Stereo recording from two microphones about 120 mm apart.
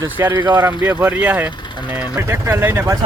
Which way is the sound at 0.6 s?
20° right (ahead or behind).